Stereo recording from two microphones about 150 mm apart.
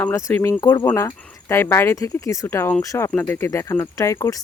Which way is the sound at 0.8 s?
20° left (ahead or behind).